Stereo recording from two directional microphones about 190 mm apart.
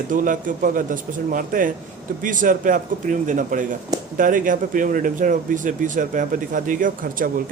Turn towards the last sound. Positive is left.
turn(degrees=-45)  # may be behind; listen again after turning